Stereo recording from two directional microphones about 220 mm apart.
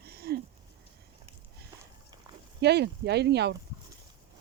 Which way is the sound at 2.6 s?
50° right (ahead or behind).